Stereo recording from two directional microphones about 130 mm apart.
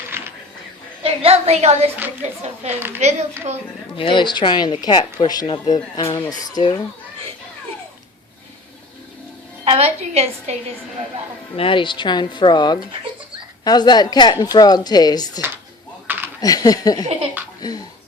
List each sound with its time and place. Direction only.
0.2 s a sound: 15° right (ahead or behind)
1.0 s a woman's voice: 50° right (ahead or behind)
3.9 s a woman's voice: 40° left (ahead or behind)
9.6 s a woman's voice: 50° right (ahead or behind)
11.5 s a woman's voice: 45° left (ahead or behind)
16.0 s a sound: 15° right (ahead or behind)
16.4 s a woman's voice: 30° left (ahead or behind)